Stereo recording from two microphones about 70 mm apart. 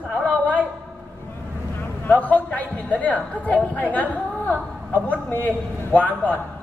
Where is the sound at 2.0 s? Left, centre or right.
Left.